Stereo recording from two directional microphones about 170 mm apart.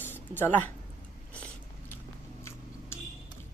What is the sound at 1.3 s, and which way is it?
Biting, 5° left (ahead or behind).